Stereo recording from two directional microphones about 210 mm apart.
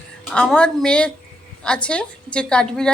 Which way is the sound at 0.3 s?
5° left (ahead or behind).